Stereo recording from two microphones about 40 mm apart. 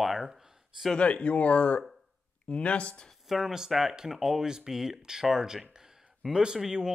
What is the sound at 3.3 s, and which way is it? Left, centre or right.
A man's voice, centre.